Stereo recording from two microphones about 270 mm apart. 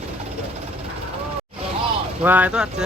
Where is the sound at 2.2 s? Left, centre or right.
Centre.